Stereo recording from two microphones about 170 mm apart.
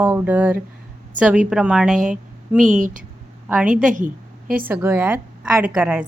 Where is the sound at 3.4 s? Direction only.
5° right (ahead or behind).